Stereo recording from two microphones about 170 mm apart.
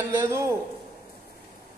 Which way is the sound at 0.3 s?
15° right (ahead or behind).